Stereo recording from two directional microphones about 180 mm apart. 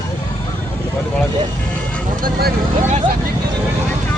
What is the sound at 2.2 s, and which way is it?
Vehicle, 60° right (ahead or behind).